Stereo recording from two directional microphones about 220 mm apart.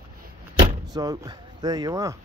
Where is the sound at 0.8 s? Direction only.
15° right (ahead or behind).